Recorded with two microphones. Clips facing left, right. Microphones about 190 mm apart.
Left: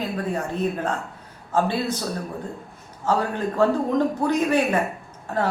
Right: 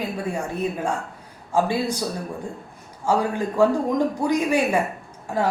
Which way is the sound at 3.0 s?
10° right (ahead or behind).